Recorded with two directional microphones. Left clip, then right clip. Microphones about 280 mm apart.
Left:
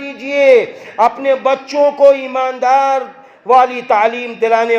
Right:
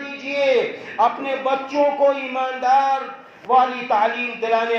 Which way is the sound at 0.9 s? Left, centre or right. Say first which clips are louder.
Left 7 dB; left.